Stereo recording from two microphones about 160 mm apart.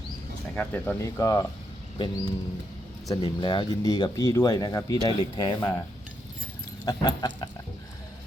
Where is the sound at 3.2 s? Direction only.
30° left (ahead or behind).